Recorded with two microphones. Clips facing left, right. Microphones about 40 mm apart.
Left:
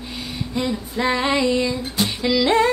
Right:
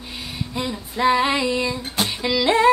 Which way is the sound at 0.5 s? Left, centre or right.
Centre.